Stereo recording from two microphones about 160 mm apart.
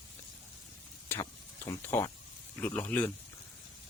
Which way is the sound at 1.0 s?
15° left (ahead or behind).